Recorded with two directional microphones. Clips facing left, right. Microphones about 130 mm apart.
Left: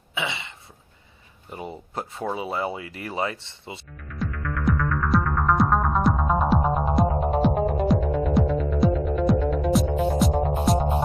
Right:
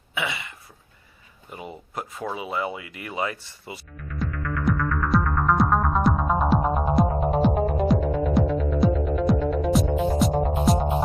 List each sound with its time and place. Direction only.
0.1 s a sound: 25° left (ahead or behind)
1.5 s speech: 35° left (ahead or behind)
3.9 s music: centre (ahead or behind)